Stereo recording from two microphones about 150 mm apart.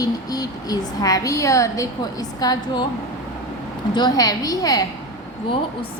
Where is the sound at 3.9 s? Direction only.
25° left (ahead or behind).